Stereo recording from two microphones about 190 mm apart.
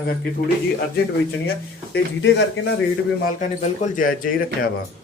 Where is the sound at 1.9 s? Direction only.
65° left (ahead or behind).